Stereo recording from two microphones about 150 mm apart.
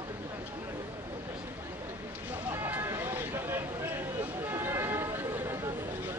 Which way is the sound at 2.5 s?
15° right (ahead or behind).